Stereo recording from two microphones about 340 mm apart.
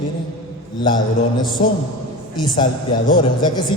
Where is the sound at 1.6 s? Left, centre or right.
Centre.